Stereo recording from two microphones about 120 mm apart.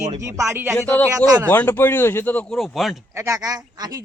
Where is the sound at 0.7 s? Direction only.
15° left (ahead or behind).